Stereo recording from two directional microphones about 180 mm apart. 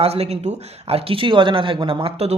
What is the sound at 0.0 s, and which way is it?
A man's voice, 35° right (ahead or behind).